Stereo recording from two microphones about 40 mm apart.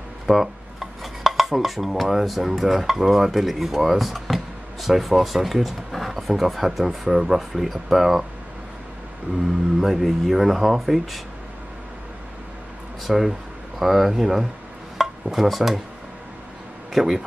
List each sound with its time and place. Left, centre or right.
0.3 s dishes: centre
4.8 s speech: centre
9.4 s speech: centre
13.0 s speech: centre
15.0 s a sound: centre
16.9 s speech: centre